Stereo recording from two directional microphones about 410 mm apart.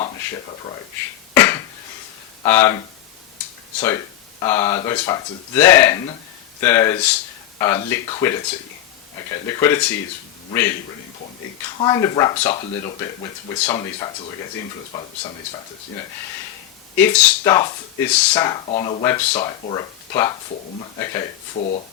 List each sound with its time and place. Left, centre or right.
1.3 s beatboxing: centre
2.4 s a man's voice: centre
11.8 s speech: centre
17.0 s speech: centre